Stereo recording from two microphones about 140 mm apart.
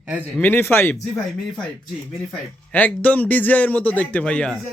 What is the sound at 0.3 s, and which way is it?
Speech, 15° left (ahead or behind).